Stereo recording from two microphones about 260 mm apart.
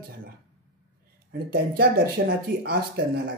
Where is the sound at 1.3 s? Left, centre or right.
Right.